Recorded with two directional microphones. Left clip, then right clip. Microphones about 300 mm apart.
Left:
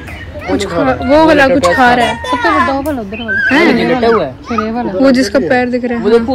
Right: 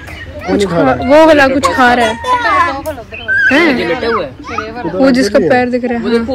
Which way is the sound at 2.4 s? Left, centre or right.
Left.